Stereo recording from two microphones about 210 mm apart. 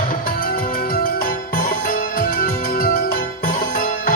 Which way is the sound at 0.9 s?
45° left (ahead or behind).